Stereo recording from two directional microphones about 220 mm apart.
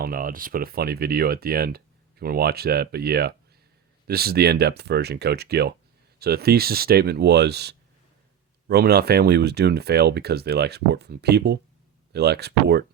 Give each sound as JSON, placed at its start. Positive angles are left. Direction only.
{"t": 0.0, "sound": "speech", "side_deg": -40}